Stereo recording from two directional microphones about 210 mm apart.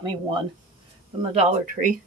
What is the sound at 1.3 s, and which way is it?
Speech, 30° right (ahead or behind).